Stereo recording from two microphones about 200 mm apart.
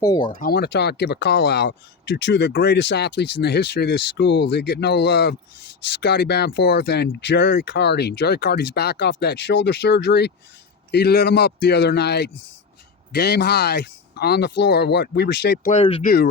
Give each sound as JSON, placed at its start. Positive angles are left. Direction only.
{"t": 0.0, "sound": "speech", "side_deg": 20}
{"t": 0.3, "sound": "speech", "side_deg": 50}
{"t": 15.8, "sound": "speech", "side_deg": 30}
{"t": 16.0, "sound": "speech", "side_deg": 50}